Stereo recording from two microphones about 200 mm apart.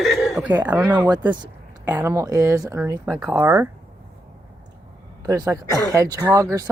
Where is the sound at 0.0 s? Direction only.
Centre (ahead or behind).